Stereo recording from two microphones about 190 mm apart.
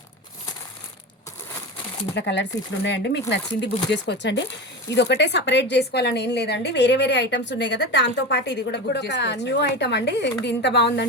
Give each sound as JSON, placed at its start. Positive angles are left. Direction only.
{"t": 2.1, "sound": "a woman's voice", "side_deg": 65}